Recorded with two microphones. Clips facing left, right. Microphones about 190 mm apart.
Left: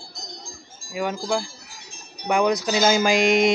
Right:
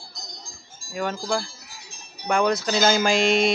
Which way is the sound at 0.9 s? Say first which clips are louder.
Left 1 dB; 10° left (ahead or behind).